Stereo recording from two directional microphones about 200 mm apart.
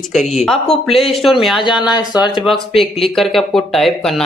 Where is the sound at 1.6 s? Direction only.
20° left (ahead or behind).